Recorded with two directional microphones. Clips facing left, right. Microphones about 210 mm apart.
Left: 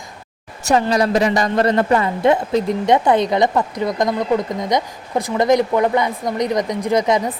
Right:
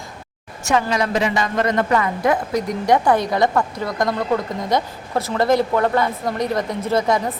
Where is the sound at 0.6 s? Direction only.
35° left (ahead or behind).